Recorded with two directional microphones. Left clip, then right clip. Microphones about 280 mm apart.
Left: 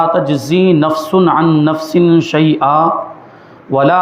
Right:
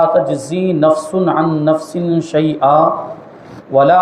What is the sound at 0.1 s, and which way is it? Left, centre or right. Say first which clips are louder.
A man's voice: left 1 dB; left.